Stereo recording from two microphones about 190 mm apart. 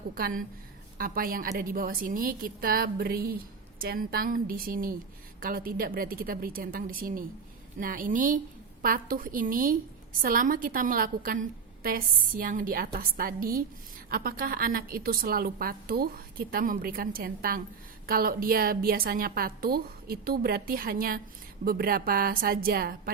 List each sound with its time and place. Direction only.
0.1 s a woman's voice: 50° right (ahead or behind)